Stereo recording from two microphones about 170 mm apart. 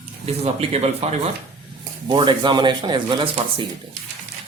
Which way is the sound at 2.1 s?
25° right (ahead or behind).